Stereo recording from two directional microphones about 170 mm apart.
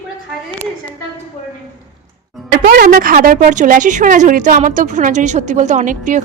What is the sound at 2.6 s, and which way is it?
Speech, 60° right (ahead or behind).